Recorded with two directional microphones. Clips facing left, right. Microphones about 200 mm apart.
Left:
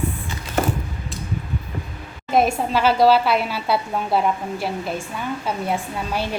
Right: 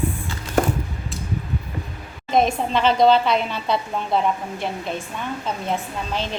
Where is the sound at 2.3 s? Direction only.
5° left (ahead or behind).